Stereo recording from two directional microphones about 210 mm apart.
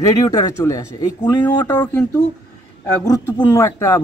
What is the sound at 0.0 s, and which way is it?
Speech, 15° left (ahead or behind).